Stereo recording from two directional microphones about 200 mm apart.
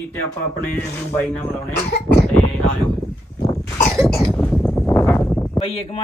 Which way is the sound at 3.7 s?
5° left (ahead or behind).